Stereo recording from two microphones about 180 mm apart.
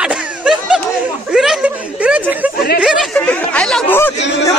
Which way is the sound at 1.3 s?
5° right (ahead or behind).